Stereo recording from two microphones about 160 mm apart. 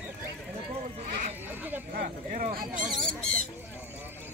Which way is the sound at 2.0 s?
65° right (ahead or behind).